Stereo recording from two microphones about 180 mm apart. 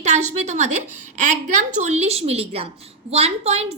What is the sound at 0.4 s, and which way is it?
A woman's voice, 40° right (ahead or behind).